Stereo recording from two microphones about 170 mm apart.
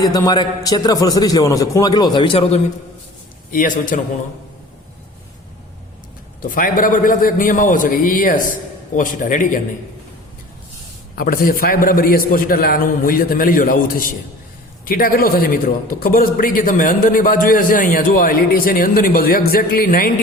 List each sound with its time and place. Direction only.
0.0 s a man's voice: 25° left (ahead or behind)
3.5 s a man's voice: 50° left (ahead or behind)
6.4 s a man's voice: 55° left (ahead or behind)
11.1 s a man's voice: 60° left (ahead or behind)